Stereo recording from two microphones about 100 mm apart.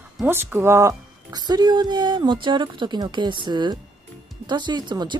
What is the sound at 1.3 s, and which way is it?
A woman's voice, 45° right (ahead or behind).